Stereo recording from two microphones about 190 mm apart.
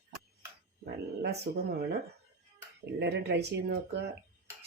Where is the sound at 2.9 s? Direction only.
60° right (ahead or behind).